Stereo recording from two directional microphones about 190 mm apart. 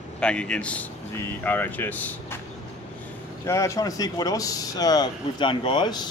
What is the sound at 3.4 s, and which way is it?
Speech, 15° left (ahead or behind).